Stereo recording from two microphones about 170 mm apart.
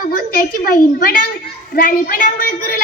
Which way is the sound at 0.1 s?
55° left (ahead or behind).